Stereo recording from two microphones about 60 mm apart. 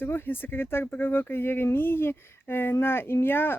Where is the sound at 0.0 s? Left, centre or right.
Left.